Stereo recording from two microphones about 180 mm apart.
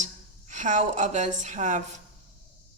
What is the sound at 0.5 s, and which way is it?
A woman's voice, 40° right (ahead or behind).